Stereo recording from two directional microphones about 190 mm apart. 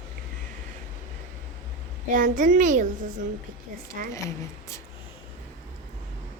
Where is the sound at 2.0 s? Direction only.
45° right (ahead or behind).